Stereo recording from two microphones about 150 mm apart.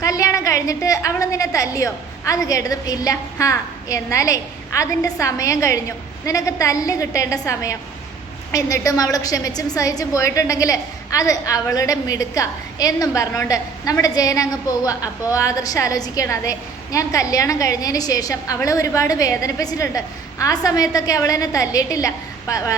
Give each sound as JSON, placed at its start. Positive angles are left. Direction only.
{"t": 0.0, "sound": "a woman's voice", "side_deg": 20}